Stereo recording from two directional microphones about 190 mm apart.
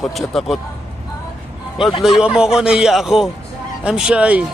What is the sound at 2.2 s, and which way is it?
Speech, 5° right (ahead or behind).